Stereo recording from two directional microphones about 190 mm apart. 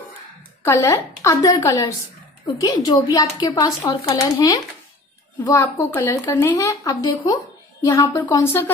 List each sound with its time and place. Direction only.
0.7 s speech: 15° left (ahead or behind)